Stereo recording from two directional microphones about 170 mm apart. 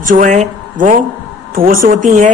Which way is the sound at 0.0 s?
50° right (ahead or behind).